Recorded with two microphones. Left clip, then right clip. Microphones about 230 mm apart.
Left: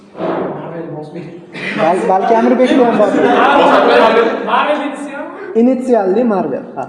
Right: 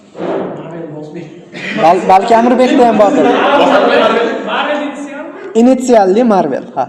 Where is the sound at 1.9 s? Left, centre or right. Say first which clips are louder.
Right 5 dB; right.